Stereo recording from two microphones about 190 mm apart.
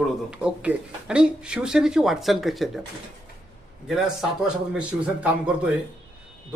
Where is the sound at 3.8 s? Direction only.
5° right (ahead or behind).